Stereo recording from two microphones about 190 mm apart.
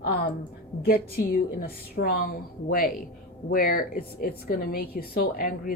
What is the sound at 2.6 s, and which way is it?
Speech, 50° left (ahead or behind).